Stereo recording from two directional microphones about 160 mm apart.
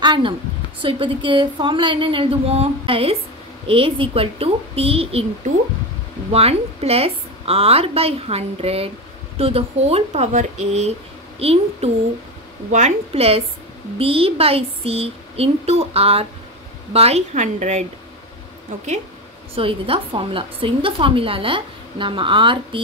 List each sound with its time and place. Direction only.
0.0 s a woman's voice: 30° right (ahead or behind)
6.3 s a woman's voice: 40° right (ahead or behind)
19.5 s a woman's voice: 35° right (ahead or behind)